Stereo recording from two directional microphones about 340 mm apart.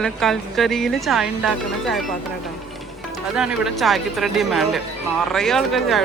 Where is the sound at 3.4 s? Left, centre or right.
Centre.